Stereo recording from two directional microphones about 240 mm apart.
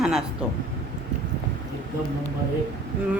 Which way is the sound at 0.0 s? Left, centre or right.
Centre.